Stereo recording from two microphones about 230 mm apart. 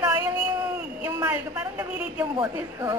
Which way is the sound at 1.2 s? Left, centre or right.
Centre.